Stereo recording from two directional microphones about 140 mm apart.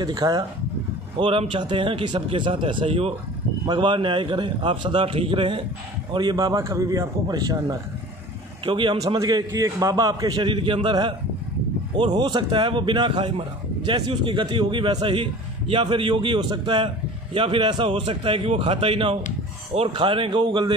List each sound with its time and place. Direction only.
0.0 s a man's voice: 30° right (ahead or behind)
1.2 s a man's voice: 40° right (ahead or behind); by 7.8 s 25° right (ahead or behind)
8.6 s a man's voice: 35° right (ahead or behind)